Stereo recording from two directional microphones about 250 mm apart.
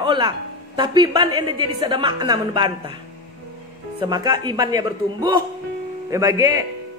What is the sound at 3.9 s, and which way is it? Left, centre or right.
A woman's voice, centre.